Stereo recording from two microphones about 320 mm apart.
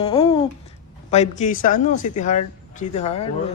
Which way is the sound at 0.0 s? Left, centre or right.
Centre.